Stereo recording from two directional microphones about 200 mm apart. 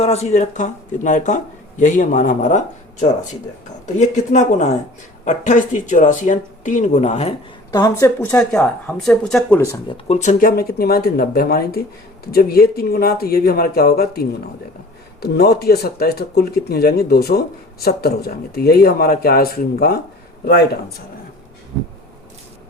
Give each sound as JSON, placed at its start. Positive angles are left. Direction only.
{"t": 0.0, "sound": "speech", "side_deg": 30}
{"t": 3.9, "sound": "speech", "side_deg": 35}
{"t": 7.7, "sound": "speech", "side_deg": 15}
{"t": 10.1, "sound": "speech", "side_deg": 35}